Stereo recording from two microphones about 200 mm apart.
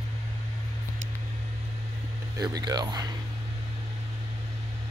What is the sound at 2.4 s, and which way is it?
Speech, 20° right (ahead or behind).